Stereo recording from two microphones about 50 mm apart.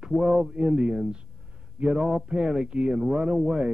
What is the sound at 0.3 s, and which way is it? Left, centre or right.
Speech, right.